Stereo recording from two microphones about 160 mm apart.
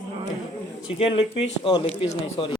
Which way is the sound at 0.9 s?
35° left (ahead or behind).